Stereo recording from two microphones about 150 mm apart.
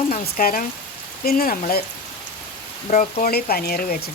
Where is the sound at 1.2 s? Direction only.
90° left.